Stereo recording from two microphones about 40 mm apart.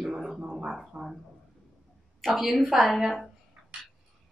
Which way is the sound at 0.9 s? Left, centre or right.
Right.